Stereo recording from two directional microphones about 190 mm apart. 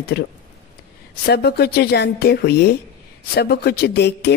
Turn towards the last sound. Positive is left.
turn(degrees=60)  # may be behind; listen again after turning